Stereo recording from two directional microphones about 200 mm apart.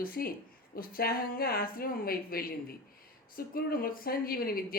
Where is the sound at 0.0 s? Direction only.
50° left (ahead or behind).